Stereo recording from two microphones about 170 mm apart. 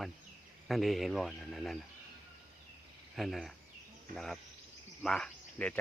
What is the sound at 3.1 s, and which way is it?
Speech, centre (ahead or behind).